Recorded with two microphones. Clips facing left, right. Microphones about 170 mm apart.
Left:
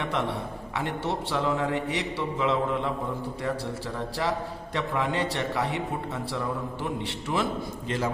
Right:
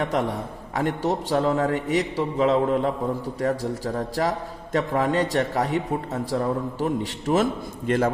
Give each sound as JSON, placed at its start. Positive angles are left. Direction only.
{"t": 0.0, "sound": "a man's voice", "side_deg": -40}
{"t": 7.9, "sound": "a man's voice", "side_deg": -55}